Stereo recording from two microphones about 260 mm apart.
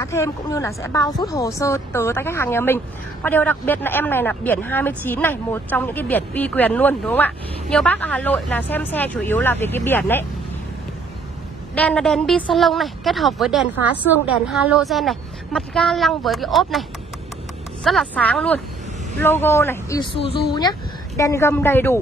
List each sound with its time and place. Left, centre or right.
0.0 s a woman's voice: centre
11.7 s a woman's voice: centre
17.8 s a woman's voice: centre